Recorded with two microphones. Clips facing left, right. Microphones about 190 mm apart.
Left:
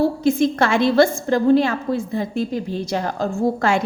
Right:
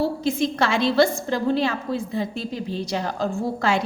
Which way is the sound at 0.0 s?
50° left (ahead or behind).